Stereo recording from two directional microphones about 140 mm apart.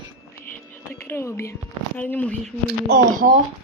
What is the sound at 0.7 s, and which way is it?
Whispering, 15° left (ahead or behind).